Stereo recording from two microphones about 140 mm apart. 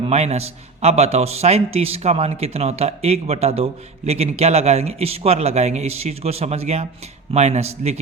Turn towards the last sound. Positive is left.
turn(degrees=-50)  # may be behind; listen again after turning